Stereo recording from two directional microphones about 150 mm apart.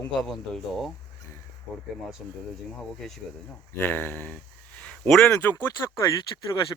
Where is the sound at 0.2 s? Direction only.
5° left (ahead or behind).